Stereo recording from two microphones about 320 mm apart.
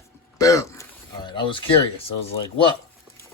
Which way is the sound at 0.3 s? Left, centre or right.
Centre.